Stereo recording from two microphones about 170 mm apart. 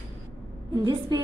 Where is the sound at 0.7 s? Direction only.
25° right (ahead or behind).